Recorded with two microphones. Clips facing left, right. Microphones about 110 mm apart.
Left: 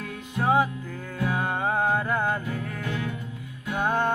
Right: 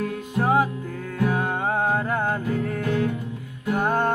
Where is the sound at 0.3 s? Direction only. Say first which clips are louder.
Right 2 dB; 45° right (ahead or behind).